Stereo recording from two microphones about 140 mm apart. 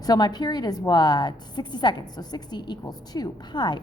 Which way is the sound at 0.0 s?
30° left (ahead or behind).